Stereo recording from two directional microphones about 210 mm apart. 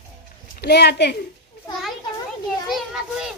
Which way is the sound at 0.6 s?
50° left (ahead or behind).